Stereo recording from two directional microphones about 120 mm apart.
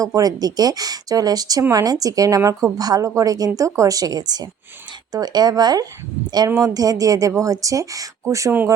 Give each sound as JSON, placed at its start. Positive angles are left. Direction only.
{"t": 0.0, "sound": "a woman's voice", "side_deg": -30}